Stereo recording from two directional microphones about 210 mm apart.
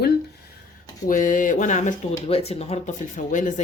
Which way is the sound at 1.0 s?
40° left (ahead or behind).